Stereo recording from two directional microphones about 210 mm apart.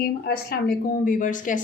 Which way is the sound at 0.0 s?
45° left (ahead or behind).